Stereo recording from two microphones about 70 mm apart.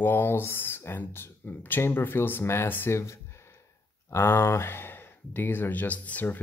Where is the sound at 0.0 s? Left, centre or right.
Left.